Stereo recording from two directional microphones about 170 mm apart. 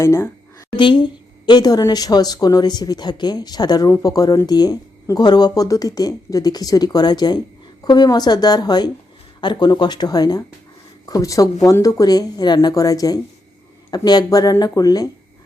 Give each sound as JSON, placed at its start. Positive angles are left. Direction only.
{"t": 0.0, "sound": "a woman's voice", "side_deg": 15}
{"t": 0.8, "sound": "speech", "side_deg": 30}